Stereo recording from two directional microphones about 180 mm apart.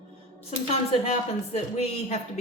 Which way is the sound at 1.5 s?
35° left (ahead or behind).